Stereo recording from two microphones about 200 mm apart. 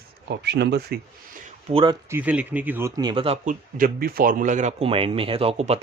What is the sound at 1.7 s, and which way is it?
Speech, 25° right (ahead or behind).